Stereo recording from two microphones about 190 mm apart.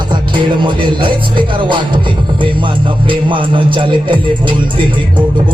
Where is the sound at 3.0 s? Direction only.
25° right (ahead or behind).